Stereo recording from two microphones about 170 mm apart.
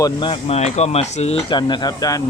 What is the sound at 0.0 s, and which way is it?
Speech, 25° left (ahead or behind).